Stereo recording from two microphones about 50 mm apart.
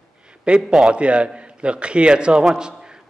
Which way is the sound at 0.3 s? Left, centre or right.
Centre.